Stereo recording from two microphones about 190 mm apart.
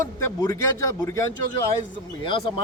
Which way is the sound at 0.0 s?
15° left (ahead or behind).